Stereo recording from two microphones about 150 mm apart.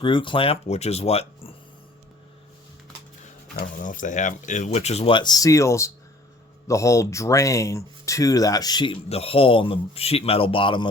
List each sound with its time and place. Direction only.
0.0 s speech: 35° left (ahead or behind)
3.5 s speech: 60° left (ahead or behind); by 10.8 s 35° left (ahead or behind)